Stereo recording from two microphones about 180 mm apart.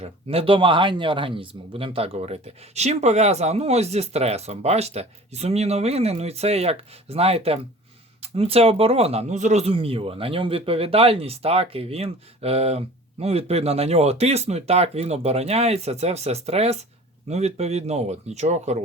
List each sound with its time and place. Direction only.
0.0 s speech: 35° right (ahead or behind)